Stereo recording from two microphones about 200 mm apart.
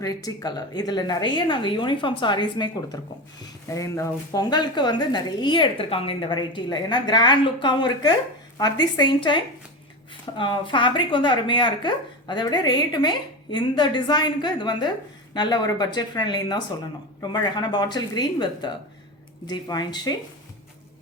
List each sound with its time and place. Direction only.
0.0 s a woman's voice: 20° left (ahead or behind)